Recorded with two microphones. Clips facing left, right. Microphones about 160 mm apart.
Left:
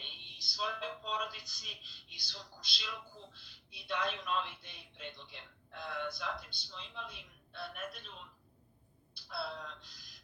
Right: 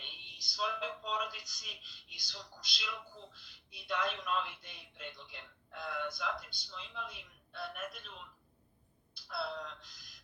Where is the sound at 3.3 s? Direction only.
45° right (ahead or behind).